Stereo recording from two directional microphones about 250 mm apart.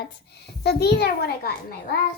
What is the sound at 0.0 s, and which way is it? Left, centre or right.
A child's voice, left.